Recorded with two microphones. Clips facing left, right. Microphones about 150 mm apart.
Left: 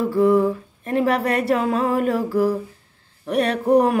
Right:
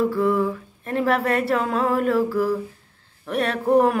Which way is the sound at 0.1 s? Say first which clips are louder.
Left 4 dB; 20° left (ahead or behind).